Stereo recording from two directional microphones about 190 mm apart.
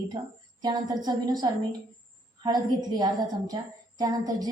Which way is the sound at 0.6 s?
20° right (ahead or behind).